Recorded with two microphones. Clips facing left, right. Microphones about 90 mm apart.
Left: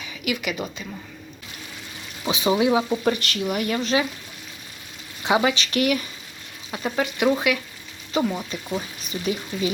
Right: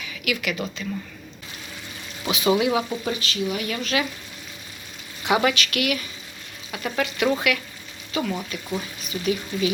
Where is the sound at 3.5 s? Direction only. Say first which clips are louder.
Left 3 dB; 35° left (ahead or behind).